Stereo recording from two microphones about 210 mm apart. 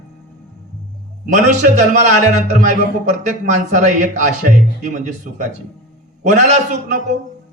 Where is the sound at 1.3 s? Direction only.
35° right (ahead or behind).